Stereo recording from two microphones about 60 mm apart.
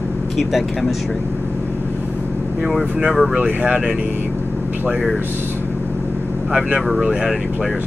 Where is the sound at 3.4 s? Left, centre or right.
Right.